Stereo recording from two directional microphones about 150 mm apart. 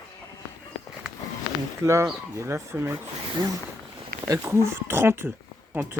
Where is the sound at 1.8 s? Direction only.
20° right (ahead or behind).